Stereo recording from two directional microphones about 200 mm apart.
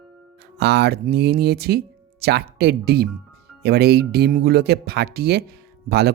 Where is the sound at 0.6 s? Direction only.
55° right (ahead or behind).